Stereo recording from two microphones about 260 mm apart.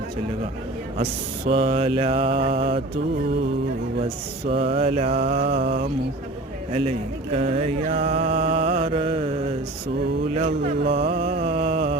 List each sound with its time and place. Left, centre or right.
1.5 s mantra: right
4.4 s mantra: right
5.4 s mantra: right
7.3 s mantra: right
10.8 s mantra: right
11.4 s mantra: right